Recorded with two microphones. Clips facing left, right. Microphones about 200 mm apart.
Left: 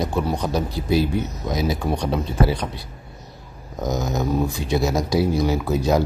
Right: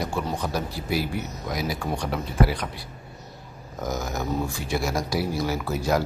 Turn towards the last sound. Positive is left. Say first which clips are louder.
# left 5 dB
turn(degrees=20)  # may be behind; listen again after turning